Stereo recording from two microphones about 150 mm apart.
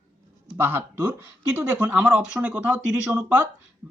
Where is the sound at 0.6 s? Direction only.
15° right (ahead or behind).